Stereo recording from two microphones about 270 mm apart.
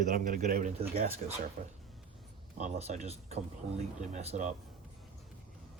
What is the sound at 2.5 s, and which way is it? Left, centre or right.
Speech, right.